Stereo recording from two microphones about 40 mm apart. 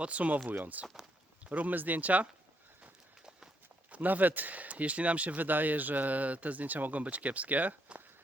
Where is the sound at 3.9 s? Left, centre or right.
Right.